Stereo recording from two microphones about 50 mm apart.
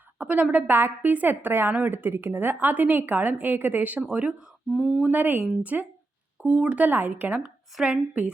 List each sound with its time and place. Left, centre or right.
0.2 s a woman's voice: right
0.5 s a woman's voice: right
4.1 s speech: right
4.7 s speech: centre
5.1 s a woman's voice: right
6.4 s speech: right
6.8 s a woman's voice: right